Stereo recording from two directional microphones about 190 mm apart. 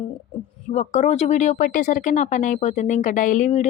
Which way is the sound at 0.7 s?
35° left (ahead or behind).